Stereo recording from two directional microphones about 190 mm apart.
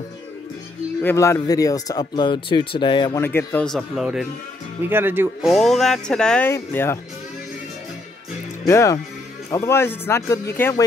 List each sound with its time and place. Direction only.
1.0 s speech: 15° left (ahead or behind)
3.2 s speech: 10° left (ahead or behind); by 5.5 s 10° right (ahead or behind)
5.5 s speech: centre (ahead or behind)
8.6 s speech: 15° left (ahead or behind)